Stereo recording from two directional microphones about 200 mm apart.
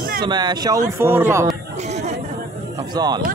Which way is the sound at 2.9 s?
20° right (ahead or behind).